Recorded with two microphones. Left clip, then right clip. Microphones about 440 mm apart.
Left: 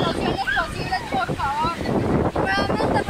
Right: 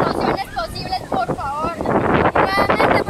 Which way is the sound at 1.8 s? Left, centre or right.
Right.